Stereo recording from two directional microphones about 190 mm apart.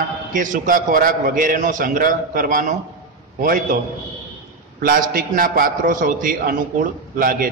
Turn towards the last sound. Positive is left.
turn(degrees=-45)  # may be behind; listen again after turning